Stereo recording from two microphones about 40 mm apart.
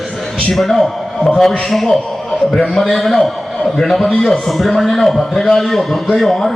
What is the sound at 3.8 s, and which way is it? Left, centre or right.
Speech, centre.